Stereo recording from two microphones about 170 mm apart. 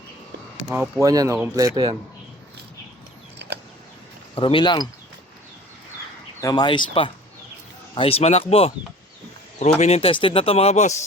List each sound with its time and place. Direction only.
0.7 s speech: 15° right (ahead or behind)
4.4 s speech: 30° left (ahead or behind)
6.4 s a man's voice: 25° left (ahead or behind); by 10.9 s 40° left (ahead or behind)